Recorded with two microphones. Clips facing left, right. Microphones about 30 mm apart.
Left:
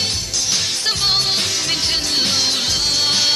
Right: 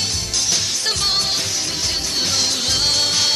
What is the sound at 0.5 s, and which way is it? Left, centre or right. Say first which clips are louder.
Music: left 3 dB; centre.